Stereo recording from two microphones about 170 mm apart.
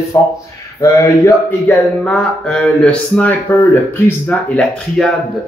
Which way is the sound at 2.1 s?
5° left (ahead or behind).